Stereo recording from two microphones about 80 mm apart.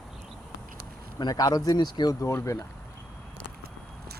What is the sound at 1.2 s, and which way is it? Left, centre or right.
Speech, left.